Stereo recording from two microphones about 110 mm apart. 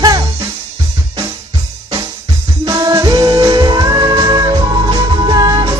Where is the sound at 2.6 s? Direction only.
30° right (ahead or behind).